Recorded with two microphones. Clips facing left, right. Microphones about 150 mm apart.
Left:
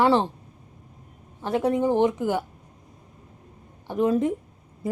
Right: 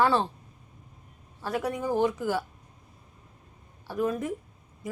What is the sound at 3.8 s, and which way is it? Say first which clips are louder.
Speech: left 7 dB; 25° left (ahead or behind).